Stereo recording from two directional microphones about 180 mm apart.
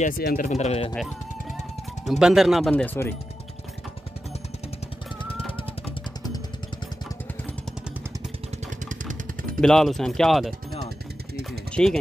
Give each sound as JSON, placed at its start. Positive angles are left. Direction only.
{"t": 0.2, "sound": "speech", "side_deg": 60}
{"t": 0.5, "sound": "speech", "side_deg": 35}
{"t": 2.0, "sound": "speech", "side_deg": -5}
{"t": 2.7, "sound": "speech", "side_deg": 10}
{"t": 8.8, "sound": "vehicle", "side_deg": -45}
{"t": 9.6, "sound": "speech", "side_deg": 0}
{"t": 11.7, "sound": "speech", "side_deg": 5}